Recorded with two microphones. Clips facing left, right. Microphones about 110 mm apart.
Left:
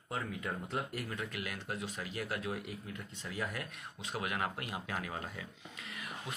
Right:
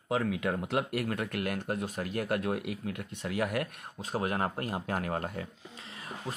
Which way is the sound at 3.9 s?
40° right (ahead or behind).